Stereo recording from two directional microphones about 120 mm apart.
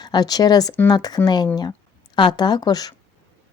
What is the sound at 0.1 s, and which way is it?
A woman's voice, 35° left (ahead or behind).